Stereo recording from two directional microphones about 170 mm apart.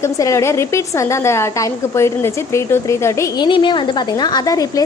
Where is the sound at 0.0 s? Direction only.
15° left (ahead or behind).